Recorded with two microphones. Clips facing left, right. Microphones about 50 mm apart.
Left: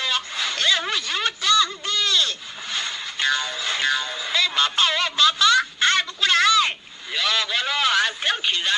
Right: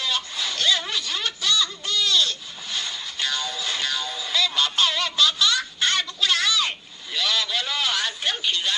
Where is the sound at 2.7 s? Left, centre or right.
Left.